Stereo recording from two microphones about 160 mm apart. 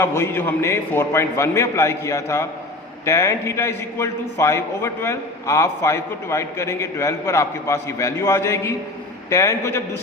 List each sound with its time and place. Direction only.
0.0 s a man's voice: 15° left (ahead or behind)